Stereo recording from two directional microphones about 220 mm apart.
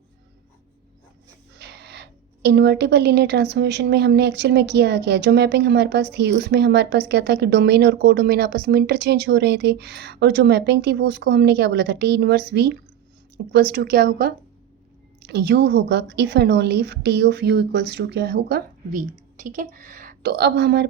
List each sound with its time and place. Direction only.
1.5 s a woman's voice: 50° right (ahead or behind)